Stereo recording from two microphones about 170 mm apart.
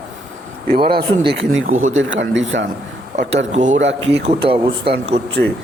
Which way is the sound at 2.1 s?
90° right.